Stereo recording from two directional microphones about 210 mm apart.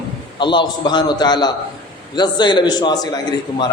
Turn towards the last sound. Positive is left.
turn(degrees=20)  # may be behind; listen again after turning